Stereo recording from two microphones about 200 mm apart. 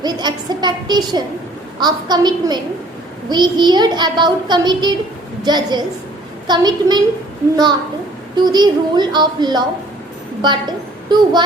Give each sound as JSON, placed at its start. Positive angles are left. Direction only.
{"t": 0.0, "sound": "a child's voice", "side_deg": -20}